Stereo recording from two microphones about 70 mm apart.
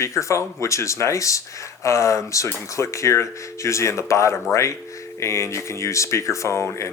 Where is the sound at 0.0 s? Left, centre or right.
Left.